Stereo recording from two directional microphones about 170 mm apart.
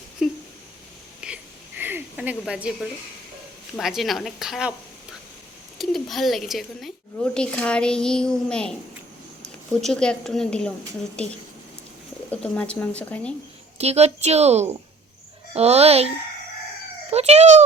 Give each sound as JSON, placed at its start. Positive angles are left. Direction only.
{"t": 0.2, "sound": "a sound", "side_deg": 0}
{"t": 2.4, "sound": "a woman's voice", "side_deg": -5}
{"t": 5.7, "sound": "speech", "side_deg": 0}
{"t": 9.8, "sound": "a woman's voice", "side_deg": 5}
{"t": 12.3, "sound": "speech", "side_deg": 5}
{"t": 13.7, "sound": "a woman's voice", "side_deg": -40}